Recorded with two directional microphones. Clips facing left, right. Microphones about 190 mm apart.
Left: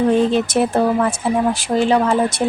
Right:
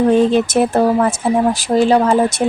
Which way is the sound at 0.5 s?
45° right (ahead or behind).